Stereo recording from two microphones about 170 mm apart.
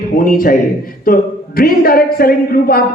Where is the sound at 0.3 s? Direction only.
55° left (ahead or behind).